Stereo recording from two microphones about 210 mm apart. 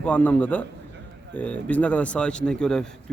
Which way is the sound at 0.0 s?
5° left (ahead or behind).